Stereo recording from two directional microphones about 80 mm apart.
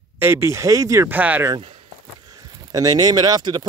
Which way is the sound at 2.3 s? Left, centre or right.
Right.